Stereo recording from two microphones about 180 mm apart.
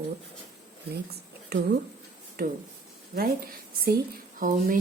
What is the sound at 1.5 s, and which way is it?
Speech, 65° right (ahead or behind).